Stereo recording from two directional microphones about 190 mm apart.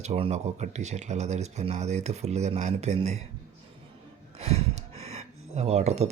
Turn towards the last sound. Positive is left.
turn(degrees=-35)  # may be behind; listen again after turning